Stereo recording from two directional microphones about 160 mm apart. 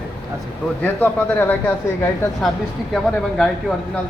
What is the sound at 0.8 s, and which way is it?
Speech, 10° left (ahead or behind).